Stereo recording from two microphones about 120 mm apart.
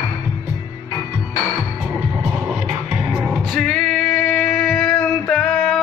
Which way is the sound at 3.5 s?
5° left (ahead or behind).